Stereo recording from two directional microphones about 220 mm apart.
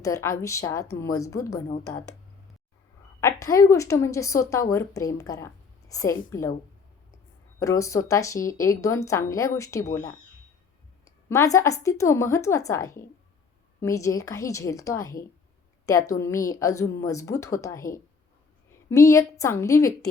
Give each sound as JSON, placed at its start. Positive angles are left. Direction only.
{"t": 0.0, "sound": "speech", "side_deg": 15}
{"t": 1.8, "sound": "speech", "side_deg": 90}
{"t": 3.4, "sound": "speech", "side_deg": 15}
{"t": 7.6, "sound": "speech", "side_deg": 15}
{"t": 11.3, "sound": "speech", "side_deg": 15}